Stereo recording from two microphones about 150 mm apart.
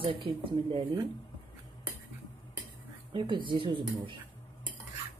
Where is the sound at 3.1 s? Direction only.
30° right (ahead or behind).